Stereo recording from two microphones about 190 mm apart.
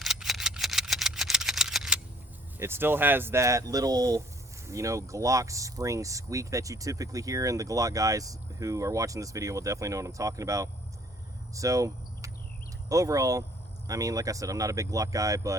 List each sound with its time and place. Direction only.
0.0 s vehicle: centre (ahead or behind)
2.6 s speech: 10° right (ahead or behind)
11.5 s cricket: 15° right (ahead or behind)
12.9 s speech: 20° right (ahead or behind)